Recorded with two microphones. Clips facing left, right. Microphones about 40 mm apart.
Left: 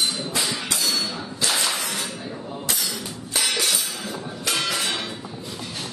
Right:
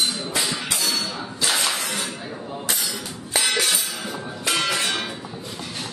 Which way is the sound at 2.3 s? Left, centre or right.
Centre.